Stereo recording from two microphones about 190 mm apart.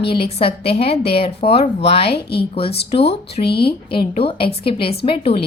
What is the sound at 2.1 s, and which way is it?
Speech, 60° left (ahead or behind).